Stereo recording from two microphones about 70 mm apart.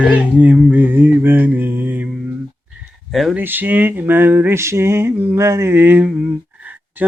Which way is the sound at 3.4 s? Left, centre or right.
Right.